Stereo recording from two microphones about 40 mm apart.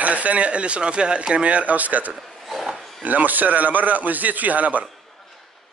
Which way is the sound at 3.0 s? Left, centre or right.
Right.